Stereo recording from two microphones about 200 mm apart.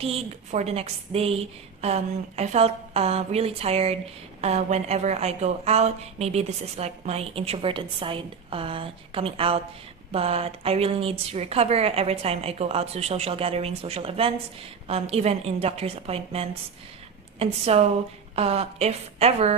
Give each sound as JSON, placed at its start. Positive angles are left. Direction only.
{"t": 0.0, "sound": "a woman's voice", "side_deg": -30}